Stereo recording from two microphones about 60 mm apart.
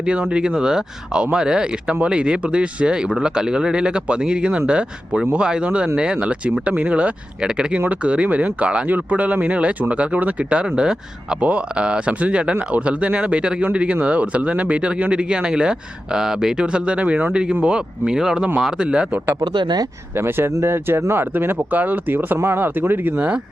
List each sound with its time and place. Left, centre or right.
0.0 s speech: centre
20.1 s speech: right